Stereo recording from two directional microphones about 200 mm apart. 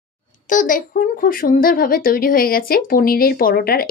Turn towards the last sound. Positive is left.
turn(degrees=50)  # may be behind; listen again after turning